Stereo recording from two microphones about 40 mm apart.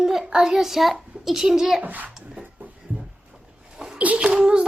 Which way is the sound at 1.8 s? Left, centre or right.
Right.